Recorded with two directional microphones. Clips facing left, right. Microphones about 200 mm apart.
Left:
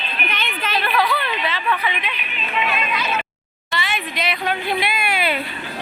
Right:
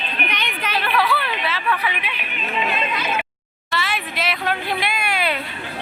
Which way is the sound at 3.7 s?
Centre (ahead or behind).